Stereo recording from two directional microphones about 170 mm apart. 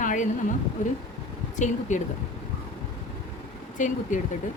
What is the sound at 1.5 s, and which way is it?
Speech, 45° left (ahead or behind).